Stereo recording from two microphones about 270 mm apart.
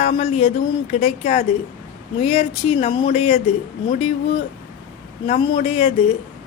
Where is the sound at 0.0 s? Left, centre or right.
Left.